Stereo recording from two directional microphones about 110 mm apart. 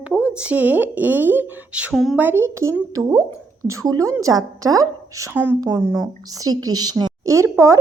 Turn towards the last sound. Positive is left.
turn(degrees=-25)  # may be behind; listen again after turning